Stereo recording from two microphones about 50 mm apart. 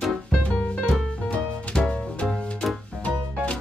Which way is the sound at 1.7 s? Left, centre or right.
Centre.